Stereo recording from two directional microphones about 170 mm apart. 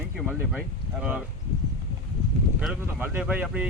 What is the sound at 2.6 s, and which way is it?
Speech, 10° right (ahead or behind).